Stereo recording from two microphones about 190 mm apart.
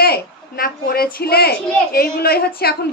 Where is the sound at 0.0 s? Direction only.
50° left (ahead or behind).